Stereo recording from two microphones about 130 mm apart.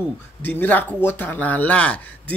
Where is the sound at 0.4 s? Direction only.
15° left (ahead or behind).